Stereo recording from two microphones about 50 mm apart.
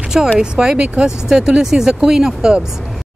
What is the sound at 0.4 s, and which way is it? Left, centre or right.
Speech, centre.